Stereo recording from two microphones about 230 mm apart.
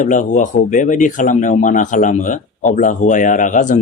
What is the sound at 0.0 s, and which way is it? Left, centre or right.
Speech, left.